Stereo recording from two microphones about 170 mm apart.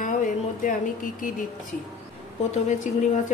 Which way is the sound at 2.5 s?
45° left (ahead or behind).